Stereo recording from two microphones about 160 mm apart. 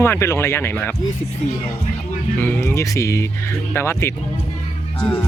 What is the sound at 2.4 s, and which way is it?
Speech, 15° left (ahead or behind).